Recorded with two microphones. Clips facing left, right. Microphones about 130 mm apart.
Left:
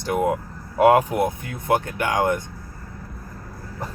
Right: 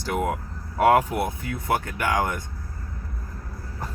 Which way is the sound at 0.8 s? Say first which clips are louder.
Left 3 dB; 20° left (ahead or behind).